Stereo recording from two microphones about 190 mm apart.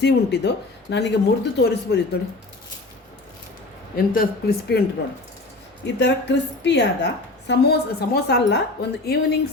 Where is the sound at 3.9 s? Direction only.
50° left (ahead or behind).